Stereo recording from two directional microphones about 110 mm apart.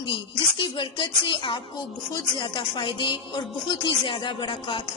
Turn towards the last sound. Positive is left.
turn(degrees=50)  # may be behind; listen again after turning